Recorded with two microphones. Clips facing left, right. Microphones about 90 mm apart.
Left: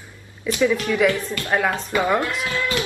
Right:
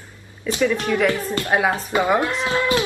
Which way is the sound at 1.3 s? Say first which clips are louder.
Right 2 dB; 20° right (ahead or behind).